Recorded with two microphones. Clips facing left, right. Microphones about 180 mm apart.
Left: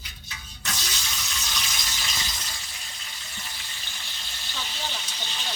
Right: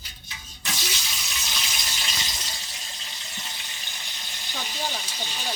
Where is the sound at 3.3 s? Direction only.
20° right (ahead or behind).